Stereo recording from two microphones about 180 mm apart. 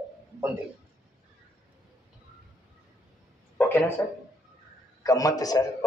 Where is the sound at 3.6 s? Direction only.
10° left (ahead or behind).